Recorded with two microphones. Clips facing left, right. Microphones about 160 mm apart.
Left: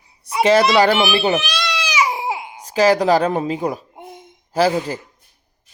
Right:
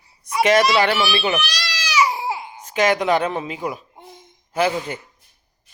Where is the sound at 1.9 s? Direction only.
20° left (ahead or behind).